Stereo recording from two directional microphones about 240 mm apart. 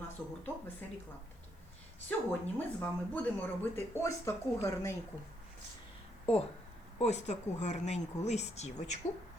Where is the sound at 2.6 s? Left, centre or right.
Centre.